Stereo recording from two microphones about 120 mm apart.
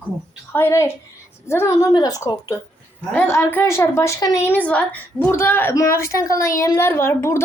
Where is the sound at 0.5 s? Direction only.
20° left (ahead or behind).